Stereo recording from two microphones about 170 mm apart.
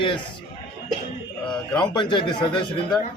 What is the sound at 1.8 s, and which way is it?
Speech, 25° left (ahead or behind).